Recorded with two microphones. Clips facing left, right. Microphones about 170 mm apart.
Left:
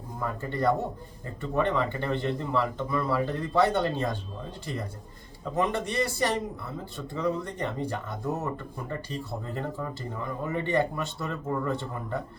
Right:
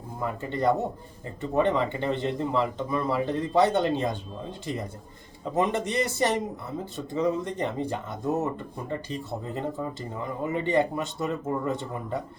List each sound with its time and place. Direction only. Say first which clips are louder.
0.2 s speech: right 1 dB; 20° right (ahead or behind)